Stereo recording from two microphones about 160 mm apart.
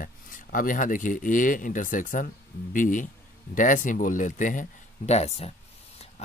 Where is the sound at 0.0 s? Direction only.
60° left (ahead or behind).